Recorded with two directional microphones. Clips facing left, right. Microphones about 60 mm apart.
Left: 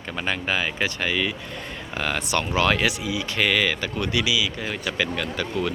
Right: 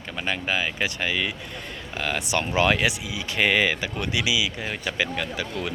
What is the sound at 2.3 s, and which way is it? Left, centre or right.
Speech, centre.